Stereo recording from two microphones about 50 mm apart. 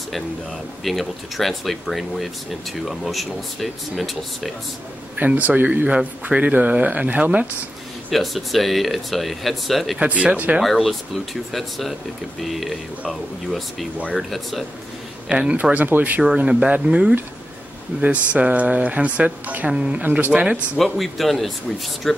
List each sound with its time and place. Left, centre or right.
0.1 s speech: centre
5.2 s speech: right
8.1 s speech: centre
9.9 s speech: right
10.6 s speech: centre
15.2 s speech: right
15.7 s speech: right
20.0 s speech: right
20.3 s speech: right
20.7 s speech: centre